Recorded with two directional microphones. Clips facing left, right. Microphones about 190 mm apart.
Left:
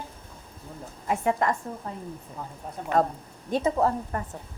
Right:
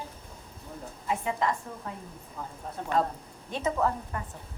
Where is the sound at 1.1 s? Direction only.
50° left (ahead or behind).